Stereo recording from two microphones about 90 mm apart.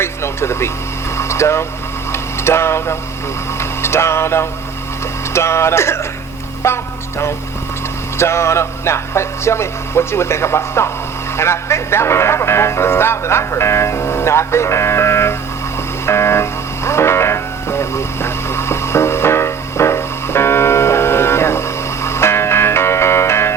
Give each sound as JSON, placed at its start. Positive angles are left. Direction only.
{"t": 0.0, "sound": "speech", "side_deg": 30}
{"t": 3.6, "sound": "music", "side_deg": 30}
{"t": 5.3, "sound": "speech", "side_deg": 30}
{"t": 8.2, "sound": "speech", "side_deg": 30}
{"t": 16.0, "sound": "music", "side_deg": 30}